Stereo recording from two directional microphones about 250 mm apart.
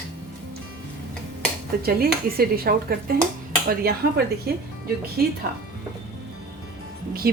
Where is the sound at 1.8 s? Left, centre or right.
Right.